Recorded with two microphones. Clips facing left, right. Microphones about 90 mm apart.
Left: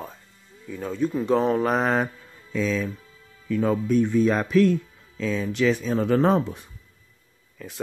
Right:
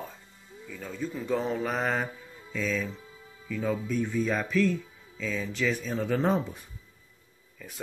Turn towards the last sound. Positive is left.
turn(degrees=75)  # may be behind; listen again after turning